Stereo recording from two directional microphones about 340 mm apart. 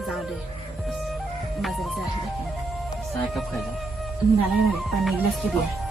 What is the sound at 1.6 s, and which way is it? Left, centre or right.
Music, centre.